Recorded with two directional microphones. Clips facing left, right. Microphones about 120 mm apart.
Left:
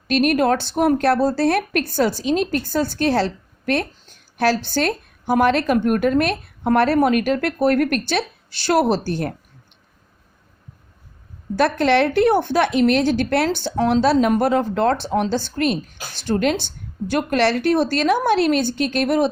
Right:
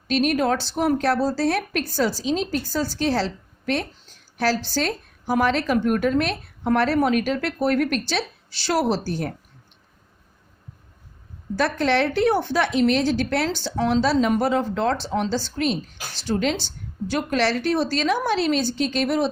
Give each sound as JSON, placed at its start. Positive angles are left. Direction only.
{"t": 0.1, "sound": "speech", "side_deg": 60}
{"t": 11.5, "sound": "speech", "side_deg": 60}